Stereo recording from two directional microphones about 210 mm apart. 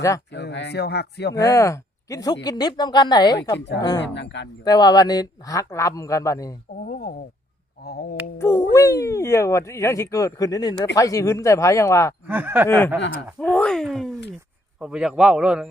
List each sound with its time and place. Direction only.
0.3 s speech: 55° left (ahead or behind)
1.4 s speech: 15° left (ahead or behind)
4.0 s speech: 55° left (ahead or behind)
4.6 s a man's voice: 20° left (ahead or behind)
6.8 s a sound: 45° left (ahead or behind)
8.4 s cat: 10° left (ahead or behind)
9.0 s a man's voice: 15° left (ahead or behind)
12.3 s snicker: 10° right (ahead or behind)
12.6 s a man's voice: 10° left (ahead or behind)